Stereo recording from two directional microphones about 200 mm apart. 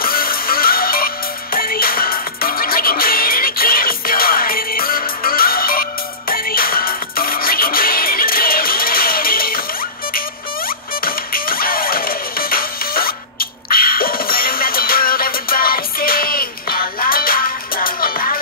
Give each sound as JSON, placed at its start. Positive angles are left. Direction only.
{"t": 0.0, "sound": "music", "side_deg": 45}
{"t": 11.1, "sound": "music", "side_deg": 45}